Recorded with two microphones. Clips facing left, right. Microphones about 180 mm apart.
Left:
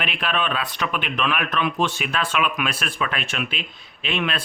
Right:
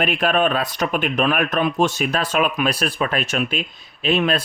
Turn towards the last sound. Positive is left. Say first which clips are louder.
# right 7 dB
turn(degrees=-40)  # may be behind; listen again after turning